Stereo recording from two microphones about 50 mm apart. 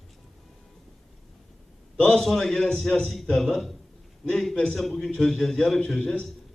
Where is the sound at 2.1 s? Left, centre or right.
Centre.